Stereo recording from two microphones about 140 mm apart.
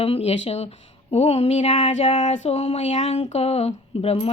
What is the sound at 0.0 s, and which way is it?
Speech, 45° left (ahead or behind).